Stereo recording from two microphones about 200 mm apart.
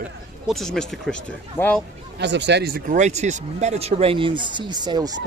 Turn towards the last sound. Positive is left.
turn(degrees=-20)  # may be behind; listen again after turning